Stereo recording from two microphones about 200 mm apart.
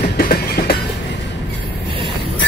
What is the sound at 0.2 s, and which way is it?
Train, 50° left (ahead or behind).